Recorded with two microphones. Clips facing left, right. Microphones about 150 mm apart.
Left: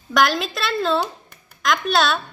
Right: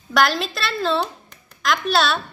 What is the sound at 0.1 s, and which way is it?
A woman's voice, centre (ahead or behind).